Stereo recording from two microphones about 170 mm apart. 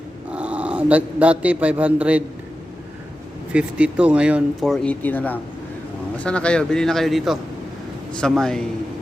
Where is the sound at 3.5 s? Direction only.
5° right (ahead or behind).